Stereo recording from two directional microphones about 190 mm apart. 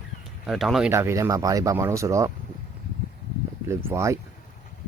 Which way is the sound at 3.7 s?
15° right (ahead or behind).